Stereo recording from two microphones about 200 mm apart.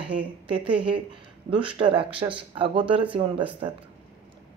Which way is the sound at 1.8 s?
25° right (ahead or behind).